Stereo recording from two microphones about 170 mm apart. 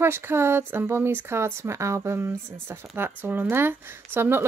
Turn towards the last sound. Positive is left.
turn(degrees=-10)  # may be behind; listen again after turning